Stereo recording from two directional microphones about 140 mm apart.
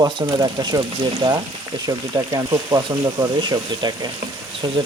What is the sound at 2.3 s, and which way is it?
Frying, 25° right (ahead or behind).